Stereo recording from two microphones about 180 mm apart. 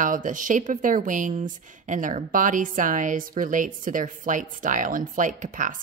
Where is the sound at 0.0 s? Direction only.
45° right (ahead or behind).